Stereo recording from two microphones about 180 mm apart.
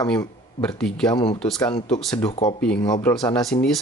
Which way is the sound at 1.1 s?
25° left (ahead or behind).